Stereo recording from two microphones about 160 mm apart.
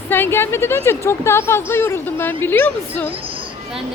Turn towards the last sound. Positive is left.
turn(degrees=10)  # may be behind; listen again after turning